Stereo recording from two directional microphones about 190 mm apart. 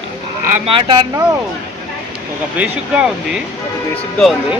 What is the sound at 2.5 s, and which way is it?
Speech, 5° right (ahead or behind).